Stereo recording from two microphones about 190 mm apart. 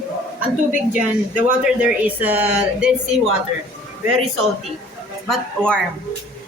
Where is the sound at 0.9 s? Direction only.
5° right (ahead or behind).